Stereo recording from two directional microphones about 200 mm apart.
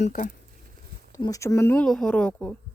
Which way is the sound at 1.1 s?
15° left (ahead or behind).